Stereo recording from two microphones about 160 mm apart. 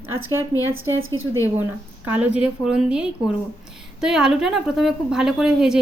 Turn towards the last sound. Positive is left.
turn(degrees=-5)  # may be behind; listen again after turning